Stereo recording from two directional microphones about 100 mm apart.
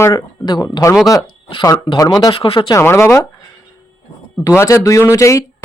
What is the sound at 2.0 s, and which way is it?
Speech, 40° left (ahead or behind).